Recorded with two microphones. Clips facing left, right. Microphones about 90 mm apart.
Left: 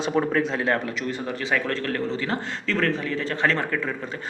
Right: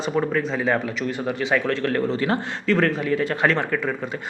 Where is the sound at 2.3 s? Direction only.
35° right (ahead or behind).